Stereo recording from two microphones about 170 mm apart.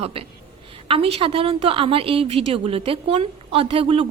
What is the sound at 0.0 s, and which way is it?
A woman's voice, 35° right (ahead or behind).